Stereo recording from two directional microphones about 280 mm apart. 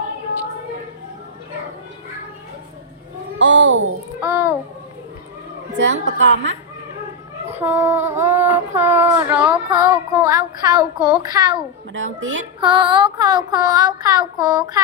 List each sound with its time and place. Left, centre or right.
3.3 s a child's voice: right
4.2 s a child's voice: centre
5.8 s a woman's voice: right
7.4 s a sound: centre
11.9 s a woman's voice: right
12.5 s a sound: centre